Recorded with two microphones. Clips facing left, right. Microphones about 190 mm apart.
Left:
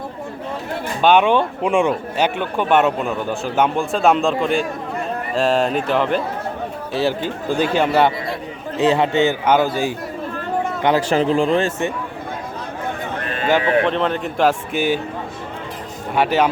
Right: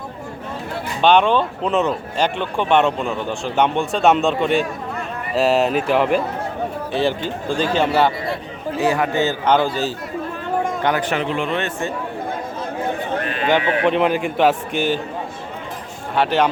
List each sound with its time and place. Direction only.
1.0 s speech: 10° left (ahead or behind)
7.2 s a man's voice: 10° left (ahead or behind)
10.8 s speech: 30° left (ahead or behind)
13.6 s speech: 35° left (ahead or behind)
13.8 s speech: 10° right (ahead or behind); by 15.0 s 10° left (ahead or behind)
16.1 s speech: 10° left (ahead or behind)